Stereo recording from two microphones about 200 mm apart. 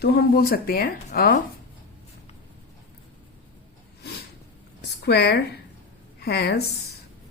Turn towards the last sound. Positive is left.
turn(degrees=55)  # may be behind; listen again after turning